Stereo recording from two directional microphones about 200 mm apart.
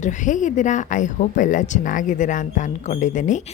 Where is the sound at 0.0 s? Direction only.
40° left (ahead or behind).